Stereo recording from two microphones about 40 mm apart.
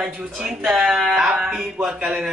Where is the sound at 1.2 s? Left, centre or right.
Centre.